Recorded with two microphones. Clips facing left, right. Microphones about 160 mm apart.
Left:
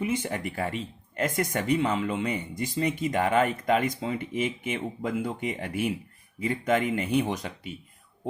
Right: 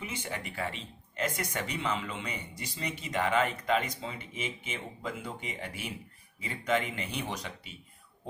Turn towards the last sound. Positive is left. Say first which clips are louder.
# left 7 dB
turn(degrees=50)  # may be behind; listen again after turning